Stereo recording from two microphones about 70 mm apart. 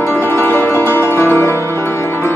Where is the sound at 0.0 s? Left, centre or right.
Left.